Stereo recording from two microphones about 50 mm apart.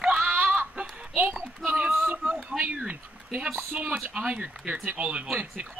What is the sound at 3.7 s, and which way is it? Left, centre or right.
Speech, right.